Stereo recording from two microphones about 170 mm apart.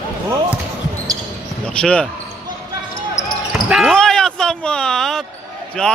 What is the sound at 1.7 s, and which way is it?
Speech, 5° left (ahead or behind).